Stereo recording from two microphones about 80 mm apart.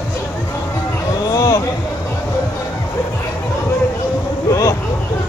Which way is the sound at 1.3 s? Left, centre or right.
Left.